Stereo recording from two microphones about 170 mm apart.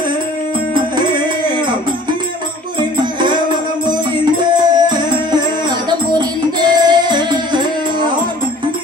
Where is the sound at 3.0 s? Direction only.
25° right (ahead or behind).